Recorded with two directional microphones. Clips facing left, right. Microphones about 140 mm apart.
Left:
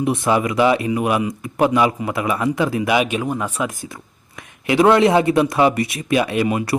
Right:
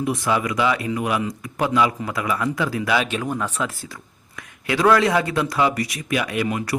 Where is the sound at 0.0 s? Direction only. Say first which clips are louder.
Left 4 dB; 25° left (ahead or behind).